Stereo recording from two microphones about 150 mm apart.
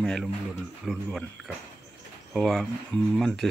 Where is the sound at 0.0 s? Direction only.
5° left (ahead or behind).